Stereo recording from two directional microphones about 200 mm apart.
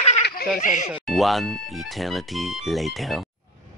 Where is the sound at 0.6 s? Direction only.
40° left (ahead or behind).